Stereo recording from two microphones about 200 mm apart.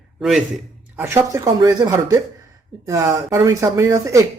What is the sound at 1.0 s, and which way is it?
A woman's voice, 15° right (ahead or behind).